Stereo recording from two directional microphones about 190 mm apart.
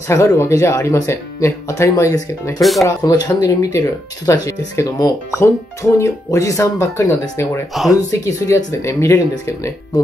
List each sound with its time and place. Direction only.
0.1 s speech: 15° left (ahead or behind)
7.7 s speech: centre (ahead or behind)
8.1 s speech: 15° left (ahead or behind)